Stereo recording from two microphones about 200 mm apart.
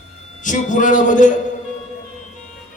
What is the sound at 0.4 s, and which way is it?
Speech, 40° left (ahead or behind).